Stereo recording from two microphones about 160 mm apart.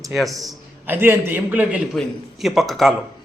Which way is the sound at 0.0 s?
Centre (ahead or behind).